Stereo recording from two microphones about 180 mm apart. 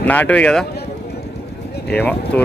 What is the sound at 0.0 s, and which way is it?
Speech, 10° left (ahead or behind).